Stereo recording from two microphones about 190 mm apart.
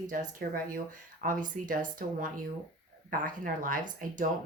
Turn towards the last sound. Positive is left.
turn(degrees=-45)  # may be behind; listen again after turning